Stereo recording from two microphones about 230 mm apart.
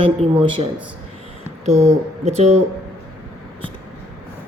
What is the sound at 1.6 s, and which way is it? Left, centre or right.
Speech, right.